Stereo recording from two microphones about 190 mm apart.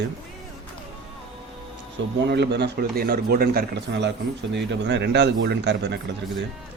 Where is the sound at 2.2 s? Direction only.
65° right (ahead or behind).